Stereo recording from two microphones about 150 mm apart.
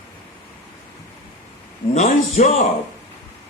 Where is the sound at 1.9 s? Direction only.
55° left (ahead or behind).